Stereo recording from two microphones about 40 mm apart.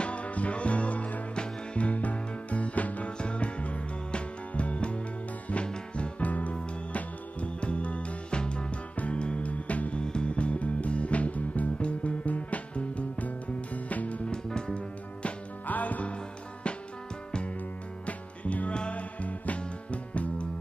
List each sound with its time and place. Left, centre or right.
0.0 s music: left
1.3 s music: left
1.9 s music: left
3.2 s music: left
10.0 s music: left
14.2 s music: left
15.6 s music: left
18.0 s music: left